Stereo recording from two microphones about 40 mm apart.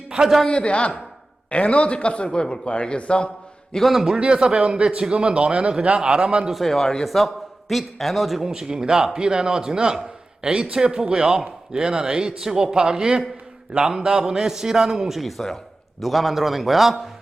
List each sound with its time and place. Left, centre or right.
0.4 s a man's voice: left
3.8 s a man's voice: centre
4.0 s a man's voice: right
6.5 s a man's voice: centre
8.4 s a man's voice: centre
15.1 s a man's voice: centre